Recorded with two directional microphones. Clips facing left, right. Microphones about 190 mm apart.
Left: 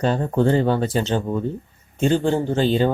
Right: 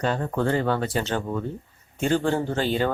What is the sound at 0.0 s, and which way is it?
Speech, 25° left (ahead or behind).